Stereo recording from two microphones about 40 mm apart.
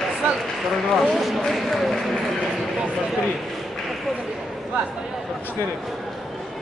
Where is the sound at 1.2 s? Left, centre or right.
Centre.